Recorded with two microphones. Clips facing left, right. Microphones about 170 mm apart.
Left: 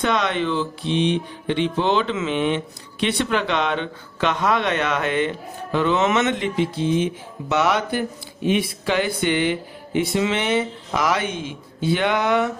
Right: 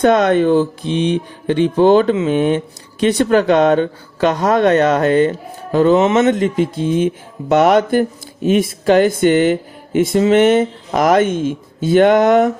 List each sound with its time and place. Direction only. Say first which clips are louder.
0.0 s speech: right 10 dB; 45° right (ahead or behind)